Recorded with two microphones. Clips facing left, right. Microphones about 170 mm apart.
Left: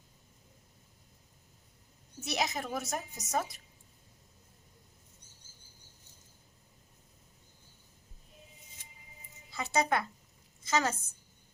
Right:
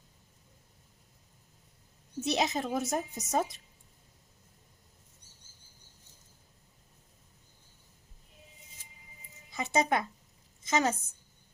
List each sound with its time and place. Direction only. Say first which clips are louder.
2.2 s speech: right 4 dB; 25° right (ahead or behind)
9.5 s speech: right 2 dB; 20° right (ahead or behind)
10.6 s a sound: right 2 dB; 20° right (ahead or behind)